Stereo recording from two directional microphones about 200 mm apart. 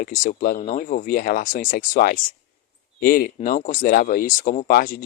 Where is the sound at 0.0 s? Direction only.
40° left (ahead or behind).